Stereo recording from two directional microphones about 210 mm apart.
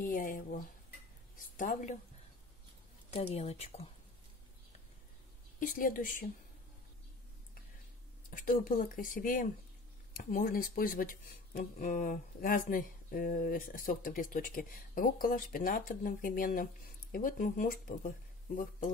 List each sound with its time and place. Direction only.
0.0 s speech: 40° left (ahead or behind)
1.6 s speech: 40° left (ahead or behind)
3.1 s a woman's voice: 30° left (ahead or behind)
5.6 s speech: 40° left (ahead or behind)
8.3 s speech: 40° left (ahead or behind)